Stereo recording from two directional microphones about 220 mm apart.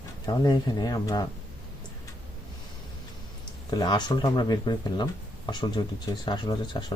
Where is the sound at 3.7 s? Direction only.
20° left (ahead or behind).